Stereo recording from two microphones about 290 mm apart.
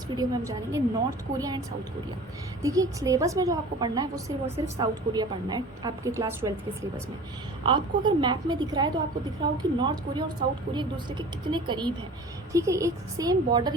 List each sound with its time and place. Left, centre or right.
0.2 s a woman's voice: centre
7.6 s a woman's voice: centre